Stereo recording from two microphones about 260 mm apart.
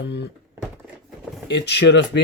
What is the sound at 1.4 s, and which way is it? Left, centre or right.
Speech, left.